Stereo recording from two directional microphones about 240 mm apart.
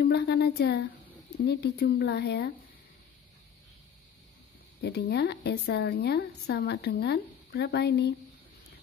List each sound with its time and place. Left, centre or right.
0.0 s a woman's voice: left
4.8 s a woman's voice: left